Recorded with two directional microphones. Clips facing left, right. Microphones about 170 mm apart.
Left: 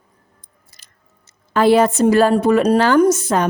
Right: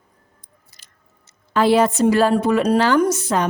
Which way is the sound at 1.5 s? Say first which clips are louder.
Left 2 dB; 50° left (ahead or behind).